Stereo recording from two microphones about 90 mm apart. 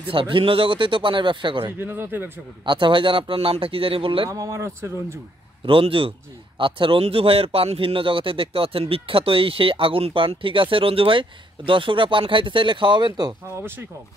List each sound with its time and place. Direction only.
0.0 s speech: 75° right (ahead or behind)
1.7 s speech: 25° right (ahead or behind)
2.6 s speech: 65° right (ahead or behind)
4.3 s speech: 35° right (ahead or behind)
5.7 s speech: 85° right
6.6 s speech: 75° right (ahead or behind); by 13.3 s 60° right (ahead or behind)
13.6 s speech: 25° right (ahead or behind)